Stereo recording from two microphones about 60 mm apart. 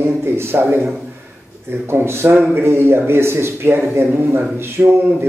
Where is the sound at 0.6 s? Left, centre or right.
Right.